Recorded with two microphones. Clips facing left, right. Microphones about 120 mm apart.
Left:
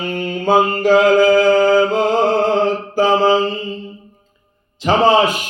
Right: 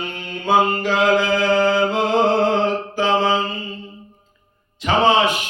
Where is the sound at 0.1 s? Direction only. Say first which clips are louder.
Left 4 dB; 45° left (ahead or behind).